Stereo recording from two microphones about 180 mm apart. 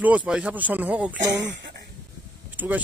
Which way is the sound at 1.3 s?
90° right.